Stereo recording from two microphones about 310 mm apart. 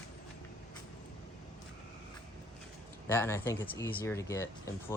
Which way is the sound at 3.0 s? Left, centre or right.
Centre.